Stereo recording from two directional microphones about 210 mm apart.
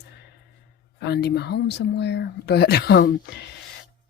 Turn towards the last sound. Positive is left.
turn(degrees=50)  # may be behind; listen again after turning